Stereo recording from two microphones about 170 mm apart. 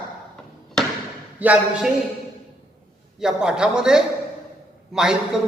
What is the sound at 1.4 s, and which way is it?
Speech, 10° right (ahead or behind).